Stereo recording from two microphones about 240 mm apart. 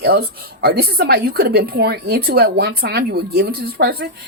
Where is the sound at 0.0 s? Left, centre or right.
Right.